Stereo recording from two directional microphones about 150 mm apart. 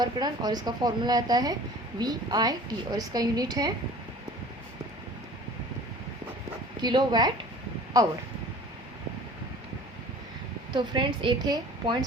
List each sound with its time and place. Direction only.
0.0 s a woman's voice: 25° right (ahead or behind)
6.8 s a woman's voice: 30° right (ahead or behind)
10.7 s a woman's voice: 30° right (ahead or behind)